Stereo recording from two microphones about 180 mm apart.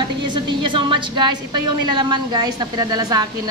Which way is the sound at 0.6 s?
30° right (ahead or behind).